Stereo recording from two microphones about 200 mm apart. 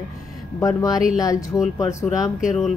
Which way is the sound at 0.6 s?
15° left (ahead or behind).